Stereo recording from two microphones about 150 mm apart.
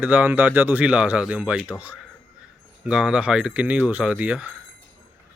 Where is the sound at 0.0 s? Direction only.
10° right (ahead or behind).